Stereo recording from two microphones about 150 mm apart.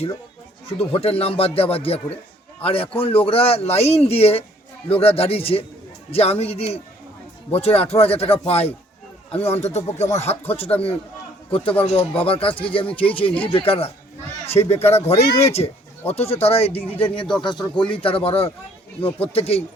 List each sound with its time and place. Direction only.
0.9 s speech: 40° left (ahead or behind)
17.4 s speech: 30° left (ahead or behind)